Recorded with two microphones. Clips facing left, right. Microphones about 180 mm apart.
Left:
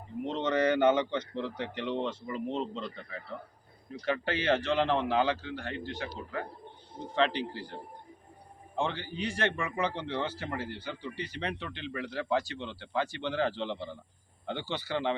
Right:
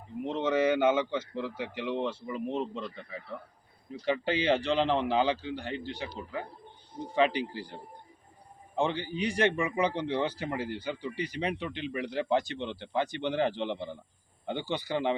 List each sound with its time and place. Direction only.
0.3 s a man's voice: 10° right (ahead or behind)
8.7 s a man's voice: 15° right (ahead or behind)